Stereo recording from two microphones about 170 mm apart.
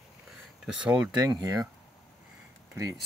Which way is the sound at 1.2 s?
20° right (ahead or behind).